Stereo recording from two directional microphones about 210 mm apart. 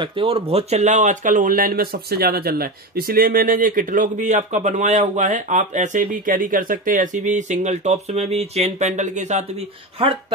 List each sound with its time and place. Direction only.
0.0 s speech: 25° right (ahead or behind)